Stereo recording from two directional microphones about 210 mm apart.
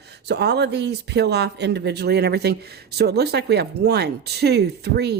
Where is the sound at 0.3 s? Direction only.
50° right (ahead or behind).